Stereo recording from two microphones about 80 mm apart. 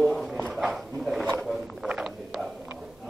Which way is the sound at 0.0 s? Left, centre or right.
Centre.